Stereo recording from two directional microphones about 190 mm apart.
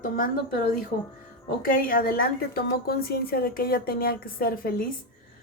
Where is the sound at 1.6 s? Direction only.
50° left (ahead or behind).